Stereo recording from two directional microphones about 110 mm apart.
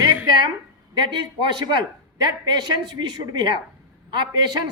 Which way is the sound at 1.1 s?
45° right (ahead or behind).